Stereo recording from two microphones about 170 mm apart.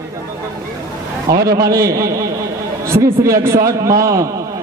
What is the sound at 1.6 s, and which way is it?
Speech, 20° right (ahead or behind).